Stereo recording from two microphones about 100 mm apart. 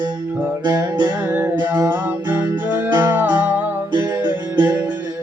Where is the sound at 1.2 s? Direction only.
20° right (ahead or behind).